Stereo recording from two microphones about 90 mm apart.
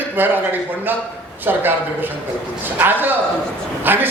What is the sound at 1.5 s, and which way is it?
A man's voice, 20° right (ahead or behind).